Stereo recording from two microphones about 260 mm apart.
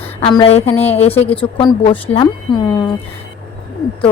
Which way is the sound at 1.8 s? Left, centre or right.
Centre.